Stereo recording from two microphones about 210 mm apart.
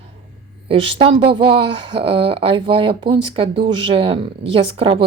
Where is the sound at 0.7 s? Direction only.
25° right (ahead or behind).